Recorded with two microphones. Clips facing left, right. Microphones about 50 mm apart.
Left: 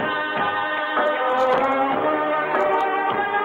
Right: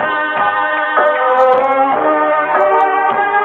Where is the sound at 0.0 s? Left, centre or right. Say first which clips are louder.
Right 8 dB; right.